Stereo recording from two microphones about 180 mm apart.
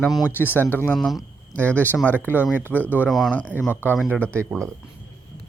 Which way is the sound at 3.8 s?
10° right (ahead or behind).